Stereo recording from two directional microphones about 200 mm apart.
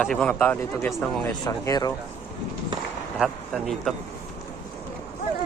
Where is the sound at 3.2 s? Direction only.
Centre (ahead or behind).